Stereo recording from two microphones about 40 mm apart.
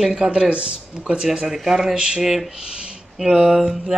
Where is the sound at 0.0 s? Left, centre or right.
Centre.